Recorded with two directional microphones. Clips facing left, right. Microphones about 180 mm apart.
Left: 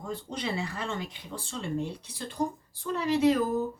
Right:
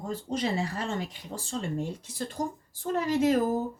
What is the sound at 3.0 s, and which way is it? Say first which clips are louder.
Speech: even; 45° right (ahead or behind).